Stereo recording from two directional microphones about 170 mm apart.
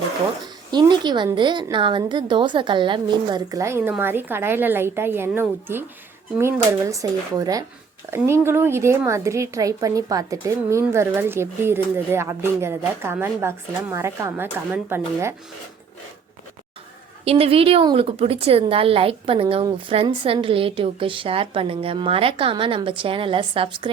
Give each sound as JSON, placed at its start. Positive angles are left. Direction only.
{"t": 0.7, "sound": "a woman's voice", "side_deg": -25}
{"t": 17.2, "sound": "a woman's voice", "side_deg": -35}